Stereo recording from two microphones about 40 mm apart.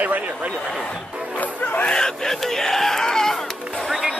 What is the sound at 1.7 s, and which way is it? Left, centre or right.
Speech, left.